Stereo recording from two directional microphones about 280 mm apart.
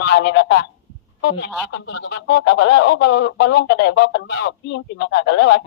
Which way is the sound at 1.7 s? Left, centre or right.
Left.